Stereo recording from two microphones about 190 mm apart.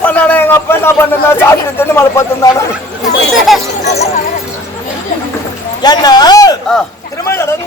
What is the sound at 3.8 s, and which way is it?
Speech, 35° left (ahead or behind).